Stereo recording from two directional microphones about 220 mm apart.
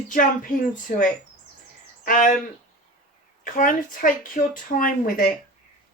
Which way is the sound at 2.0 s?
35° left (ahead or behind).